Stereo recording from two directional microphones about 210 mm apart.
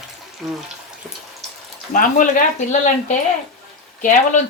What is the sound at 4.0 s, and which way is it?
Speech, 35° left (ahead or behind).